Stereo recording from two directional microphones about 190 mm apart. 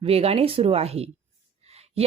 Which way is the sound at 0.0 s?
30° right (ahead or behind).